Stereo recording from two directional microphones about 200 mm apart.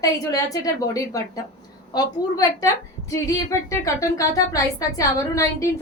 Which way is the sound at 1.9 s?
20° left (ahead or behind).